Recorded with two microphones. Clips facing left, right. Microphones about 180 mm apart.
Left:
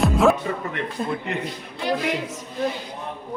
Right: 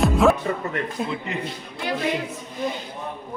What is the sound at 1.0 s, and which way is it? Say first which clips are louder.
Speech: left 2 dB; 50° left (ahead or behind).